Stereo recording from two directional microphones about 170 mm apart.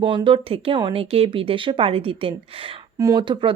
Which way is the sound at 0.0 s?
25° right (ahead or behind).